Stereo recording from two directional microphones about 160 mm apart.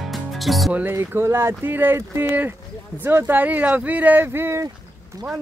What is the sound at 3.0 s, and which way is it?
Speech, 15° right (ahead or behind).